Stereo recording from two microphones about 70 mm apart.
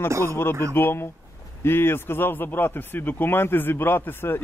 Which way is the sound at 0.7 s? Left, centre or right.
Left.